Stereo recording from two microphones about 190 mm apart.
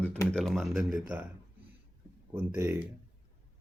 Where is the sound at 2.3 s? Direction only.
10° right (ahead or behind).